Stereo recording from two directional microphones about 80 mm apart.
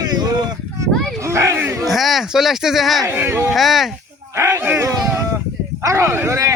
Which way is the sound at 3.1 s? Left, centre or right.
Right.